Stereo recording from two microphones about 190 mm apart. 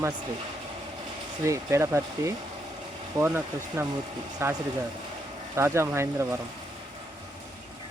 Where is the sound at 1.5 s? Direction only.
15° right (ahead or behind).